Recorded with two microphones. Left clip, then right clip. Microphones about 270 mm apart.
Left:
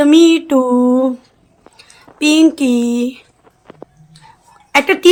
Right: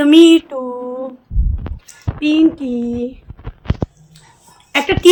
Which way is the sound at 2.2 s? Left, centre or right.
Centre.